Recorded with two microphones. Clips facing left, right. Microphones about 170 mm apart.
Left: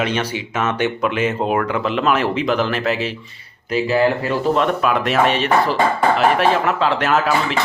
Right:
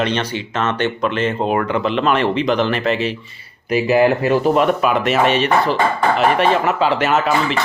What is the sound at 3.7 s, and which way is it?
Speech, 15° right (ahead or behind).